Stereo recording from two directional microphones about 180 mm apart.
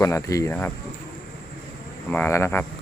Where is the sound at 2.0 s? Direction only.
10° left (ahead or behind).